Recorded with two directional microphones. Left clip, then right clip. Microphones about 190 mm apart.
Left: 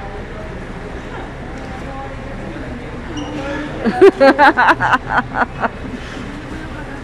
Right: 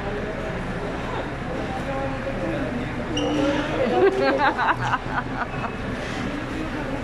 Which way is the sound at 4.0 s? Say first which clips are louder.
Left 13 dB; 45° left (ahead or behind).